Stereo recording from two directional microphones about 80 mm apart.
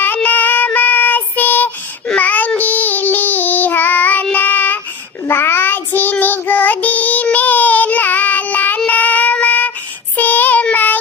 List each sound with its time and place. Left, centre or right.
0.0 s child singing: left
2.0 s baby cry: centre
2.6 s child singing: left